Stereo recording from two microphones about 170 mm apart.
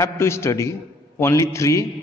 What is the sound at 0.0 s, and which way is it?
A man's voice, 15° left (ahead or behind).